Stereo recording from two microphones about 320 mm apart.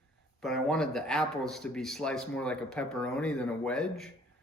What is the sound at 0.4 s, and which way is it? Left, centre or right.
Speech, centre.